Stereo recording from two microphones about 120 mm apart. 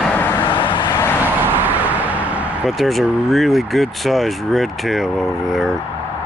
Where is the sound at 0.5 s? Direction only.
45° left (ahead or behind).